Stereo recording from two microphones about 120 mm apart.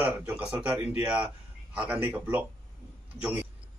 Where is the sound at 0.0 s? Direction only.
10° right (ahead or behind).